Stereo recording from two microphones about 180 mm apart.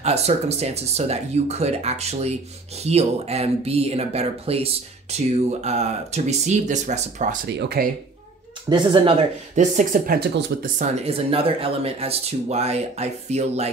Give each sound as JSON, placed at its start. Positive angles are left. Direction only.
{"t": 0.0, "sound": "speech", "side_deg": -35}
{"t": 7.4, "sound": "speech", "side_deg": -65}
{"t": 8.6, "sound": "speech", "side_deg": -25}
{"t": 9.6, "sound": "speech", "side_deg": -45}
{"t": 10.8, "sound": "speech", "side_deg": -30}